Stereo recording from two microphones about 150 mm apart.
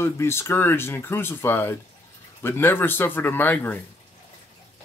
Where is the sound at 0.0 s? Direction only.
15° left (ahead or behind).